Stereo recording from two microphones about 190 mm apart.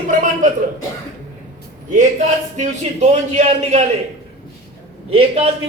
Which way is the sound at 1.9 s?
40° right (ahead or behind).